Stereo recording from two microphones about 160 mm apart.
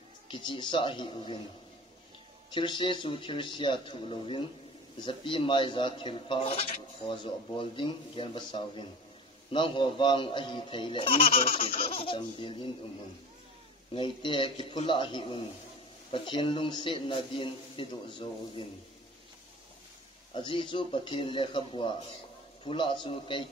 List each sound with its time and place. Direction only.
0.3 s speech: 30° left (ahead or behind)
2.5 s speech: 30° left (ahead or behind)
13.9 s speech: 30° left (ahead or behind)
20.3 s speech: 30° left (ahead or behind)